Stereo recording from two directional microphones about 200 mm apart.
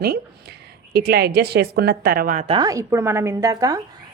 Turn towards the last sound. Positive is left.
turn(degrees=-20)  # may be behind; listen again after turning